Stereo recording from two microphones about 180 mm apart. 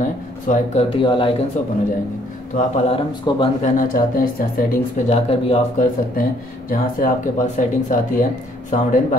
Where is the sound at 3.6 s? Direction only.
50° left (ahead or behind).